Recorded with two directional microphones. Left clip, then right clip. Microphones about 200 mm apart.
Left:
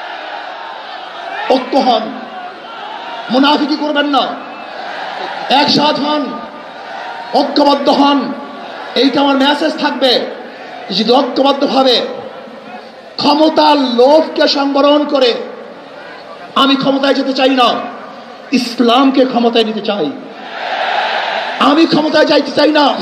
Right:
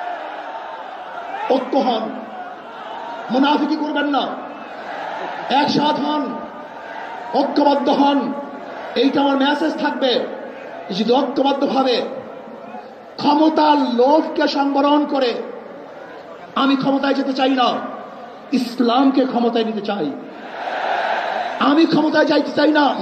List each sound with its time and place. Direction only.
1.5 s a man's voice: 40° left (ahead or behind)
3.3 s a man's voice: 40° left (ahead or behind)
5.5 s a man's voice: 40° left (ahead or behind)
7.3 s a man's voice: 40° left (ahead or behind)
13.2 s a man's voice: 40° left (ahead or behind)
16.5 s a man's voice: 40° left (ahead or behind)
21.5 s a man's voice: 40° left (ahead or behind)